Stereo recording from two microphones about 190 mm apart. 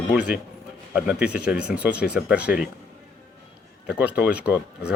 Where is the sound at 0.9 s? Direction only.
5° right (ahead or behind).